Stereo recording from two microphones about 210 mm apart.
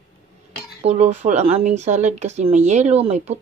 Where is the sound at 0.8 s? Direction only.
30° right (ahead or behind).